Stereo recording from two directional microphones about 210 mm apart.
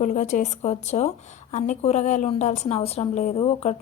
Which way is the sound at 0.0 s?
35° left (ahead or behind).